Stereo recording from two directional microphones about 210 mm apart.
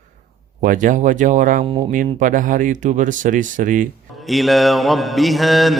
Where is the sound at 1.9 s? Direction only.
40° right (ahead or behind).